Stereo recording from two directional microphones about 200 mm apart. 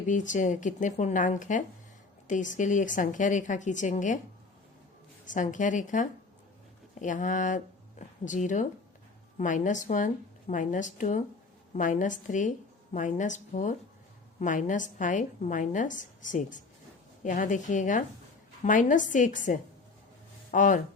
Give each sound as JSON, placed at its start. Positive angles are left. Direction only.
{"t": 0.1, "sound": "a woman's voice", "side_deg": 40}
{"t": 5.2, "sound": "a woman's voice", "side_deg": 40}
{"t": 20.5, "sound": "a woman's voice", "side_deg": 40}